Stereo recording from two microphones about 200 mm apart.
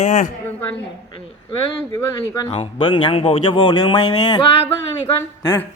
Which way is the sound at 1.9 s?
15° left (ahead or behind).